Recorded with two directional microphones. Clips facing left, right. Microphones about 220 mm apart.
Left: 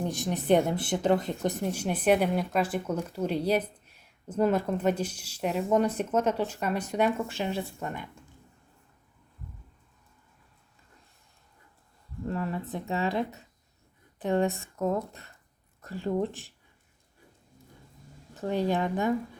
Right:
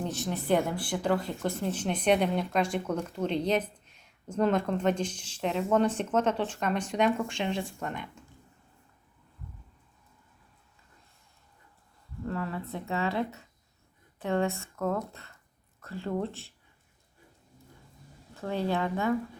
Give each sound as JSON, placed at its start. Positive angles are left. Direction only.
{"t": 0.0, "sound": "speech", "side_deg": 15}
{"t": 12.2, "sound": "speech", "side_deg": 20}
{"t": 18.3, "sound": "speech", "side_deg": 15}